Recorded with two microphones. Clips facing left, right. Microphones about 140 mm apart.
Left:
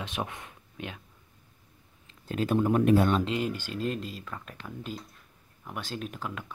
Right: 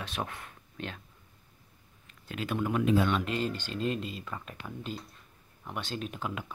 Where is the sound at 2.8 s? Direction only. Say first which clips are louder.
Left 2 dB; 55° left (ahead or behind).